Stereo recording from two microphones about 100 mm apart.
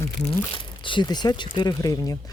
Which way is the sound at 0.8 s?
50° left (ahead or behind).